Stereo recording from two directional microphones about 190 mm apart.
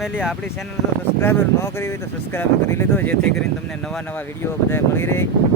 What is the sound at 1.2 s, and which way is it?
Speech, 15° left (ahead or behind).